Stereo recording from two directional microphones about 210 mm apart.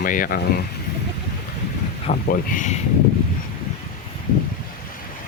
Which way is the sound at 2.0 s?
40° left (ahead or behind).